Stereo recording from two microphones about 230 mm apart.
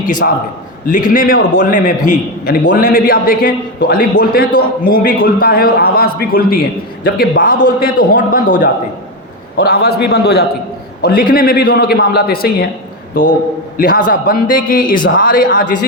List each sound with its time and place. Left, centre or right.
0.0 s a man's voice: left
13.7 s a man's voice: left